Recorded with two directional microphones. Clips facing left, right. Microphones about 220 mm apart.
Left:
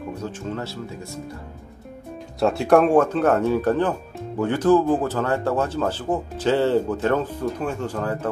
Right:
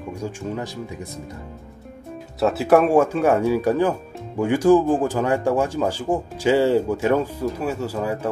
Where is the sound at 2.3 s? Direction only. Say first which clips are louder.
Even; 5° right (ahead or behind).